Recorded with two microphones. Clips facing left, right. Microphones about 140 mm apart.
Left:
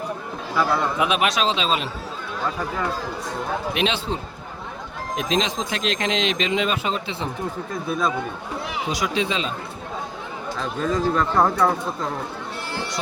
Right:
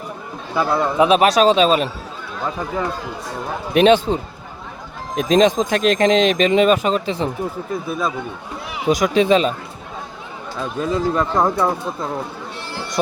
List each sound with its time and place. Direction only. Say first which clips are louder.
0.5 s a man's voice: right 4 dB; 20° right (ahead or behind)
1.0 s speech: right 11 dB; 35° right (ahead or behind)
3.8 s speech: right 15 dB; 50° right (ahead or behind)
7.7 s speech: even; centre (ahead or behind)
8.9 s speech: right 11 dB; 50° right (ahead or behind)
10.6 s speech: right 3 dB; 10° right (ahead or behind)